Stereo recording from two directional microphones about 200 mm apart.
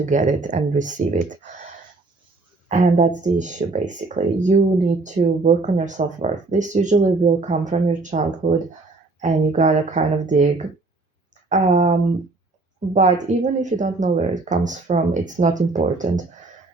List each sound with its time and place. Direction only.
0.0 s speech: 40° right (ahead or behind)
2.6 s speech: 35° right (ahead or behind)